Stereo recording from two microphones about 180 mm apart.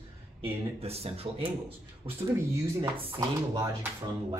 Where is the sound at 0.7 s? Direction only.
35° right (ahead or behind).